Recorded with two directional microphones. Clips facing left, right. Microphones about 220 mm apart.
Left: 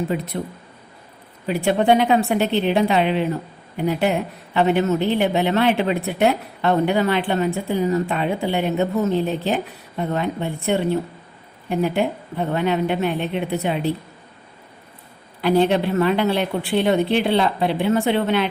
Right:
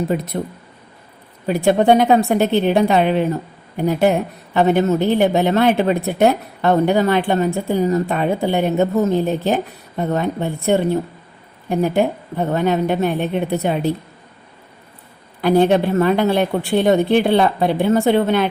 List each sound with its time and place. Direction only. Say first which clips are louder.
0.1 s a woman's voice: right 3 dB; 50° right (ahead or behind)
1.5 s a woman's voice: right 4 dB; 45° right (ahead or behind)
15.4 s a woman's voice: right 3 dB; 50° right (ahead or behind)